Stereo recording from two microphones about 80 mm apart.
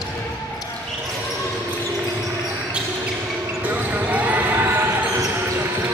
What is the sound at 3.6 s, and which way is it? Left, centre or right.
Basketball bounce, centre.